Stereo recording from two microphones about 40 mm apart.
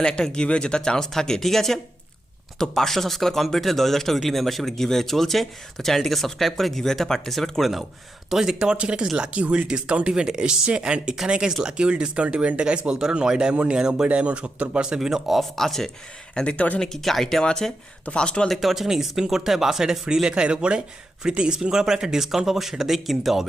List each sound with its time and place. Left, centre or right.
0.0 s a man's voice: left; by 8.5 s centre
8.5 s speech: right
15.0 s speech: centre
15.4 s a man's voice: centre
16.3 s speech: left
16.6 s speech: left
16.8 s a man's voice: centre
17.4 s a man's voice: centre
18.0 s a man's voice: left
18.4 s speech: centre